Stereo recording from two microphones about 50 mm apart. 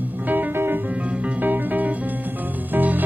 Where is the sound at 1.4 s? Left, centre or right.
Right.